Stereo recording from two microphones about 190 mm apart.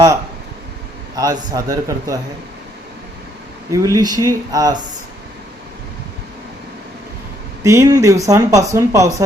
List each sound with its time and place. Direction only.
1.1 s a man's voice: 20° right (ahead or behind)
3.7 s speech: 15° right (ahead or behind)
7.6 s speech: 15° right (ahead or behind)